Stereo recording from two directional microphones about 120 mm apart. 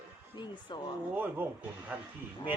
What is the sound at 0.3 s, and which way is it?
Speech, 40° left (ahead or behind).